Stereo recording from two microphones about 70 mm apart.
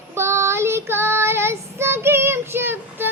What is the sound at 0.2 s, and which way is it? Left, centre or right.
Child singing, right.